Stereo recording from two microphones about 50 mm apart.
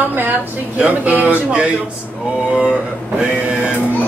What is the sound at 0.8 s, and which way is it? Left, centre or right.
Speech, right.